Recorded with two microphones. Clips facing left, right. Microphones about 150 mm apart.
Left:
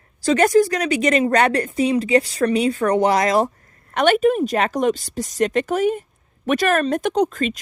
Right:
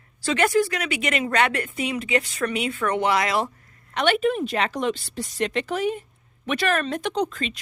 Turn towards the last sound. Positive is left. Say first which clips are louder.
# left 6 dB
turn(degrees=45)  # may be behind; listen again after turning